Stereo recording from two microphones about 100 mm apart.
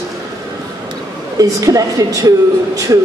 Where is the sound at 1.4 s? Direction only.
35° right (ahead or behind).